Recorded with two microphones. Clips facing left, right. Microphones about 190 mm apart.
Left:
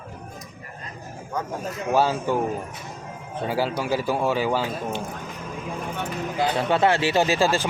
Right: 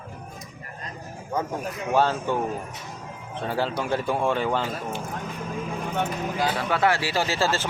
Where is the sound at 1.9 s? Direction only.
10° left (ahead or behind).